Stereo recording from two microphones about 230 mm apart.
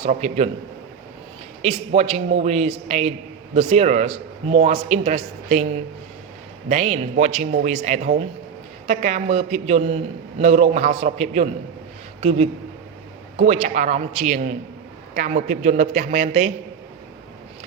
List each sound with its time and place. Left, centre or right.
0.0 s a man's voice: right
1.6 s a man's voice: right
13.4 s a woman's voice: right